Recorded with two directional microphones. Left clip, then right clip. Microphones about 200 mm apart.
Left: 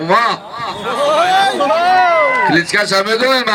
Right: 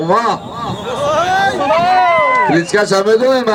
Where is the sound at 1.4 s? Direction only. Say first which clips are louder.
Even; 40° left (ahead or behind).